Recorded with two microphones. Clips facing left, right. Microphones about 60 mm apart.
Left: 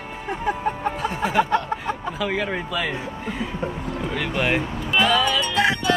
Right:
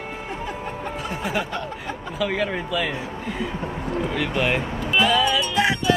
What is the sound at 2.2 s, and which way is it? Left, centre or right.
Speech, centre.